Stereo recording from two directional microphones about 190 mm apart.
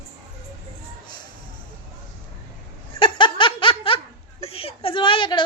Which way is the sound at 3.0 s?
25° left (ahead or behind).